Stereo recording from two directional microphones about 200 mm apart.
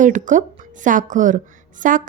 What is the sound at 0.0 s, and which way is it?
A woman's voice, 40° right (ahead or behind).